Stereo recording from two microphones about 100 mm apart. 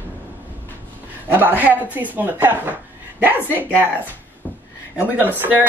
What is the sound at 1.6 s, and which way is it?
Speech, 15° right (ahead or behind).